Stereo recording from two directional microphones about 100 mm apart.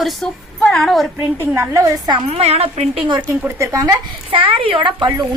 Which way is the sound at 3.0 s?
50° right (ahead or behind).